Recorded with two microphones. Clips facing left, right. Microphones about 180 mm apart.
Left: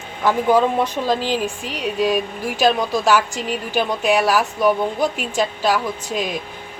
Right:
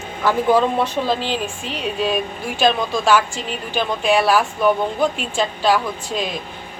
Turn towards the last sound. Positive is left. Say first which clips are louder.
# even
turn(degrees=10)  # may be behind; listen again after turning